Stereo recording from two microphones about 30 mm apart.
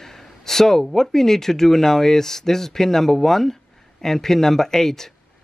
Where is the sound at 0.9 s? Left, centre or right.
Centre.